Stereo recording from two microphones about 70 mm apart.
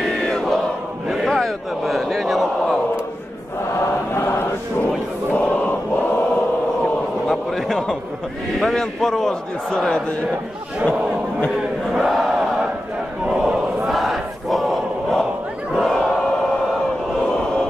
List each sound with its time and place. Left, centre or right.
0.2 s crowd: centre
1.0 s a sound: centre
4.1 s chant: left
5.3 s choir: left
7.2 s a sound: centre
8.5 s a man's voice: centre
11.9 s battle cry: centre
13.2 s a sound: centre
13.9 s crowd: centre